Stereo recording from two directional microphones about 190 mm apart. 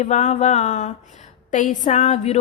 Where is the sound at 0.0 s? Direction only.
35° left (ahead or behind).